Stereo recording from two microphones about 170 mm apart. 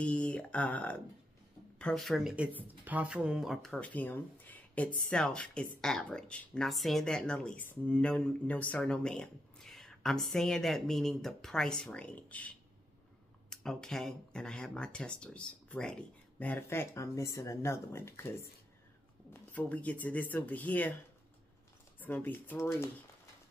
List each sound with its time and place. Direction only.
0.0 s speech: 5° left (ahead or behind)
19.5 s speech: 10° left (ahead or behind)
22.0 s speech: 10° left (ahead or behind)